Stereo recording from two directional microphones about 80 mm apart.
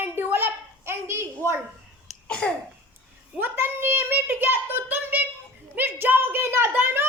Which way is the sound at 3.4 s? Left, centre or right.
Right.